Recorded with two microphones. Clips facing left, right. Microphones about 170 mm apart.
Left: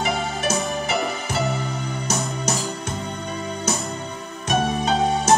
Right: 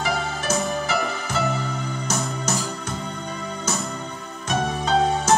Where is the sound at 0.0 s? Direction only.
20° left (ahead or behind).